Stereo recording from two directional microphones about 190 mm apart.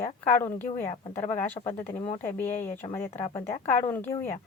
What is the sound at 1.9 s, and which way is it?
Speech, 30° left (ahead or behind).